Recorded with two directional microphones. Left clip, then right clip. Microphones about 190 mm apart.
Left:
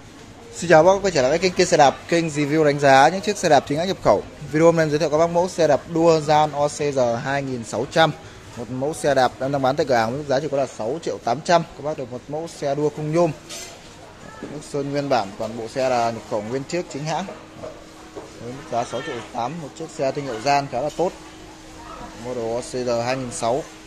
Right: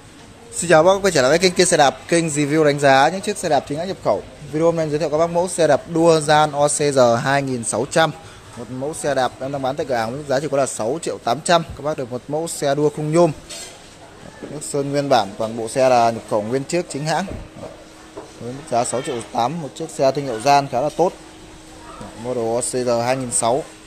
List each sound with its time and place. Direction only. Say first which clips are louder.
0.6 s speech: right 1 dB; 5° right (ahead or behind)
8.8 s speech: left 1 dB; 10° left (ahead or behind)
10.4 s speech: right 3 dB; 15° right (ahead or behind)
12.3 s speech: right 5 dB; 35° right (ahead or behind)
14.7 s speech: right 4 dB; 25° right (ahead or behind)
18.7 s speech: right 5 dB; 30° right (ahead or behind)
20.0 s speech: right 6 dB; 20° right (ahead or behind)
22.4 s speech: right 4 dB; 30° right (ahead or behind)